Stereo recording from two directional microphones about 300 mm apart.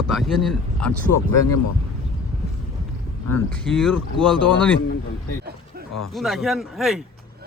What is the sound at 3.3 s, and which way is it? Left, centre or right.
Speech, centre.